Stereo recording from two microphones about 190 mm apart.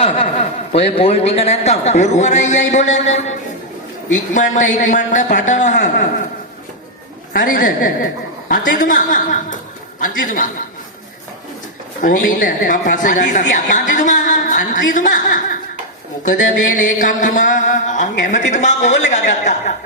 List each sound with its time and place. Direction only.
0.0 s a man's voice: 30° left (ahead or behind)
7.3 s music: 45° left (ahead or behind)
12.0 s music: 45° left (ahead or behind)
13.5 s a woman's voice: 40° left (ahead or behind)
16.2 s music: 45° left (ahead or behind)
18.2 s a man's voice: 40° left (ahead or behind)